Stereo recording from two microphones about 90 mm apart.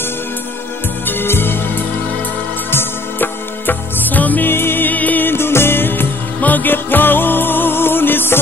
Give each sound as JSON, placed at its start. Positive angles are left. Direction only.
{"t": 1.0, "sound": "music", "side_deg": 25}